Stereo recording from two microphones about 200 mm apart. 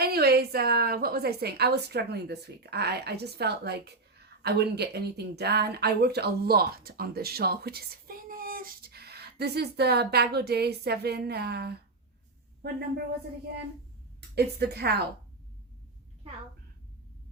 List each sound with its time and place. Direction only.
0.0 s a woman's voice: 50° right (ahead or behind)
14.2 s a woman's voice: 55° right (ahead or behind)